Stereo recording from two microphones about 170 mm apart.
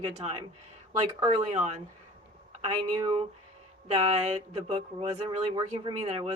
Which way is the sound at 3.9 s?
40° right (ahead or behind).